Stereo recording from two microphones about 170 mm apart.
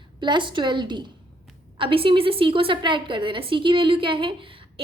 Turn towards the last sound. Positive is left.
turn(degrees=-30)  # may be behind; listen again after turning